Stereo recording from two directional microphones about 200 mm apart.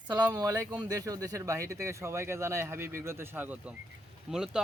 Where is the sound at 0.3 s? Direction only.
20° right (ahead or behind).